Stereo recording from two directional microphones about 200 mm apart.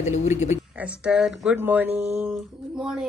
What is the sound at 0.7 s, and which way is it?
Speech, 5° right (ahead or behind).